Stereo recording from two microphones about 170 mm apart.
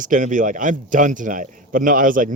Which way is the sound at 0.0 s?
50° right (ahead or behind).